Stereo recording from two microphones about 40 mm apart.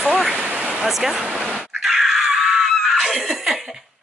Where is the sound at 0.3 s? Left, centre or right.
Right.